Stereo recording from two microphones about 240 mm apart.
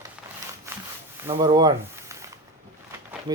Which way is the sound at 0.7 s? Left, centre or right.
Centre.